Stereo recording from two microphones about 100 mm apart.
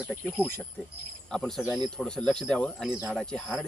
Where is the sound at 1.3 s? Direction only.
5° left (ahead or behind).